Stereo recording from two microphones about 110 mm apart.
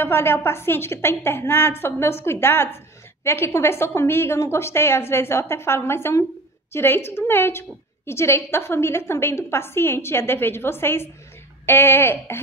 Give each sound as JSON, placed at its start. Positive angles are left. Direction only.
{"t": 0.0, "sound": "a woman's voice", "side_deg": 20}